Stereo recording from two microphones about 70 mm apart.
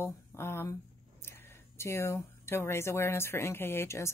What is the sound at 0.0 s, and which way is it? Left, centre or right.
Speech, left.